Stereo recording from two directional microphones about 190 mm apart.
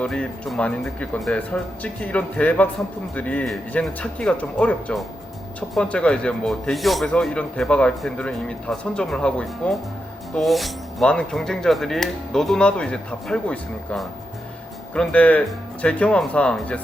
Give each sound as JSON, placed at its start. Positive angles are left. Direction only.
{"t": 0.0, "sound": "speech", "side_deg": 5}